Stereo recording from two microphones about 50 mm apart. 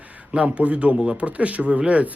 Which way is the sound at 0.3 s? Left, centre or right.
Right.